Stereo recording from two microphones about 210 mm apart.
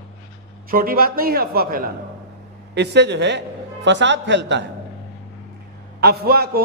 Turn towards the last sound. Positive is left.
turn(degrees=-45)  # may be behind; listen again after turning